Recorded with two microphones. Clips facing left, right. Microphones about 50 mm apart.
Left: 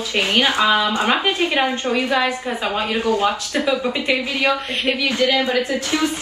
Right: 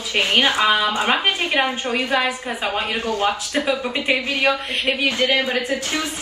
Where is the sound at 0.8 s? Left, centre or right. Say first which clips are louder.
Left 1 dB; right.